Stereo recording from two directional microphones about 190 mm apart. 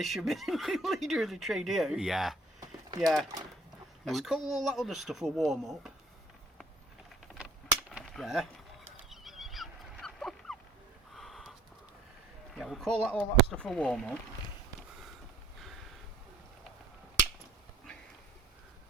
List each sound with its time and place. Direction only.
0.0 s speech: centre (ahead or behind)
7.3 s vehicle: 5° right (ahead or behind)
9.0 s horse: centre (ahead or behind)
11.1 s a sound: centre (ahead or behind)
12.5 s speech: centre (ahead or behind)